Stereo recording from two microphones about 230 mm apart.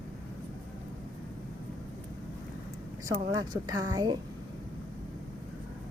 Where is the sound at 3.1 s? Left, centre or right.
Centre.